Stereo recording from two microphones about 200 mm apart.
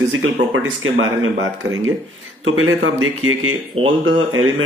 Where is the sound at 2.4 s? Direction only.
85° right.